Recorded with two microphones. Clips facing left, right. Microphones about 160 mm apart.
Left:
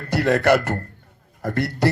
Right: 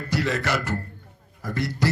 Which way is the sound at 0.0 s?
55° left (ahead or behind).